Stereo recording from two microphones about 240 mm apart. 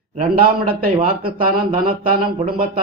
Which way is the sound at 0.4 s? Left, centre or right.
Right.